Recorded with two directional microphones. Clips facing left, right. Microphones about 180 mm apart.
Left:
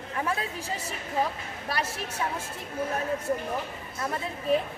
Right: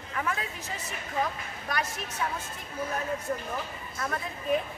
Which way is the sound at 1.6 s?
30° left (ahead or behind).